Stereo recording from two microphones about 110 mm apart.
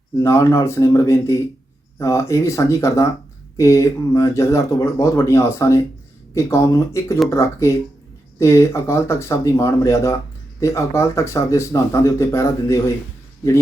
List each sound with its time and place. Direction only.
0.2 s speech: 25° left (ahead or behind)